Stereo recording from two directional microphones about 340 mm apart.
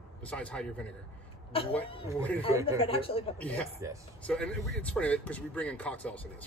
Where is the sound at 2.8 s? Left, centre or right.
Centre.